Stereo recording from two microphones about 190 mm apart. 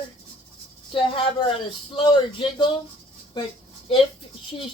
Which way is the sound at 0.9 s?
30° left (ahead or behind).